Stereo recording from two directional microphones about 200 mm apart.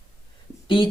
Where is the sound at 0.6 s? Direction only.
25° left (ahead or behind).